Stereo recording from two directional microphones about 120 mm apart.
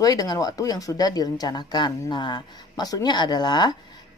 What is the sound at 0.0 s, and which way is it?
Speech, 30° left (ahead or behind).